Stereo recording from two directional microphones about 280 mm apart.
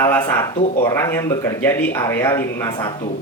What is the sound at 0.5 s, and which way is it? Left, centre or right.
Speech, left.